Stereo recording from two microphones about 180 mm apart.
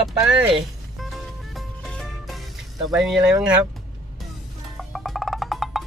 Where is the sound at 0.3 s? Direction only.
5° right (ahead or behind).